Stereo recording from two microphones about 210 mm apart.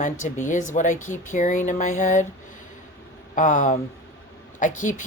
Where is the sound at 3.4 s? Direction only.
40° left (ahead or behind).